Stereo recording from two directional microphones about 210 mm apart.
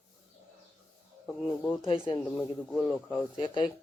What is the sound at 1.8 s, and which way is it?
Speech, 25° left (ahead or behind).